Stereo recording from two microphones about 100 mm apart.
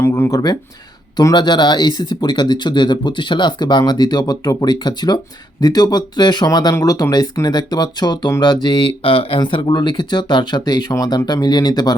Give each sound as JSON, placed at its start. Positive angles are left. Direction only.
{"t": 0.0, "sound": "speech", "side_deg": 30}